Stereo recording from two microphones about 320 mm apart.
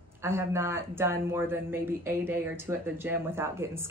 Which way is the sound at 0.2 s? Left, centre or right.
Centre.